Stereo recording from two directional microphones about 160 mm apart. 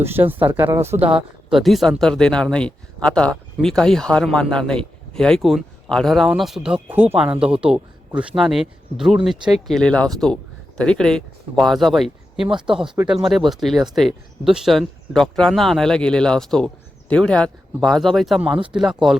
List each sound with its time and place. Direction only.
0.0 s speech: 15° right (ahead or behind)
1.5 s speech: centre (ahead or behind)
12.5 s speech: 30° right (ahead or behind)
13.1 s speech: centre (ahead or behind)